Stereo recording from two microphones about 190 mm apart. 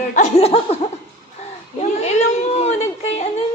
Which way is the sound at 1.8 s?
35° left (ahead or behind).